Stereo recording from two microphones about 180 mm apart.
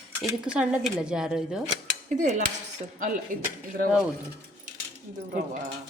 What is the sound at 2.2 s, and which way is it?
Dishes, 40° right (ahead or behind).